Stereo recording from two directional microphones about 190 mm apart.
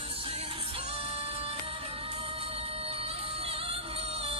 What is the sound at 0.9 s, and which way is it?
Music, 30° right (ahead or behind).